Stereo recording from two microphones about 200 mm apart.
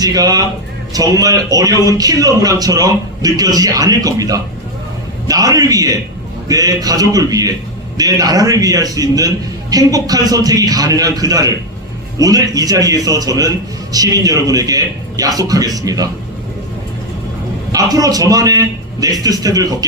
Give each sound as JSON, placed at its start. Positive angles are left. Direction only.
{"t": 0.0, "sound": "a man's voice", "side_deg": -20}
{"t": 17.7, "sound": "a man's voice", "side_deg": -20}